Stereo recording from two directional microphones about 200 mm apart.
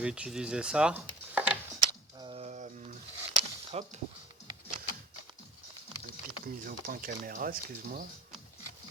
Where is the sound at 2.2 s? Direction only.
30° right (ahead or behind).